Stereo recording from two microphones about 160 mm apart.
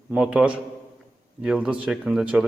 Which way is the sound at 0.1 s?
5° right (ahead or behind).